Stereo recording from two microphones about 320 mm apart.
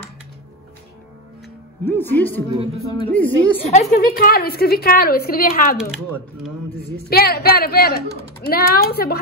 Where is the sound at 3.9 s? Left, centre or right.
Left.